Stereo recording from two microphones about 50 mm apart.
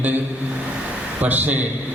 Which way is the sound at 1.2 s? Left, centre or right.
Right.